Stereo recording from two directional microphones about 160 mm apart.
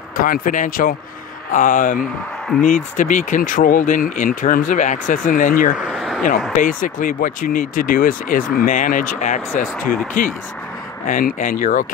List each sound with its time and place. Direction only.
0.2 s speech: 60° left (ahead or behind)
5.8 s speech: centre (ahead or behind)
6.5 s speech: 55° left (ahead or behind)